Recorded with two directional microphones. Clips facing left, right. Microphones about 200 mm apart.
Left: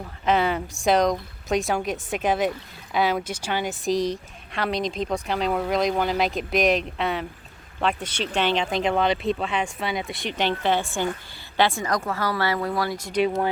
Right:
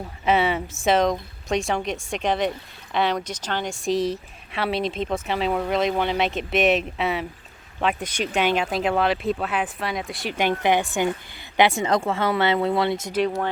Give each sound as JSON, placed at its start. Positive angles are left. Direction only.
{"t": 0.3, "sound": "a woman's voice", "side_deg": -5}